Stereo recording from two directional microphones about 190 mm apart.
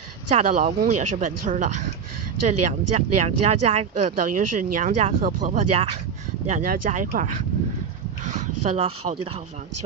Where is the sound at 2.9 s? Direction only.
35° right (ahead or behind).